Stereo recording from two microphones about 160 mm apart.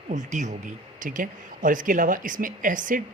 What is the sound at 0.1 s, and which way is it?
A man's voice, 50° right (ahead or behind).